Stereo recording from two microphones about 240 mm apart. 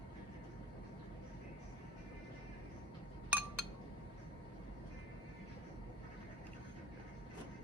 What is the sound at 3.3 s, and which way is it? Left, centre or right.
Chink, centre.